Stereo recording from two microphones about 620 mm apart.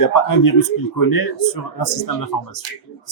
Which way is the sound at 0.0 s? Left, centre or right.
Left.